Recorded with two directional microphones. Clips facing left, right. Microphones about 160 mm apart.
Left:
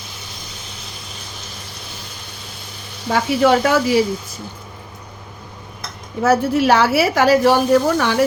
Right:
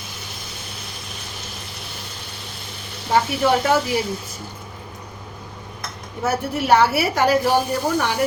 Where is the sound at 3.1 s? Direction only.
90° left.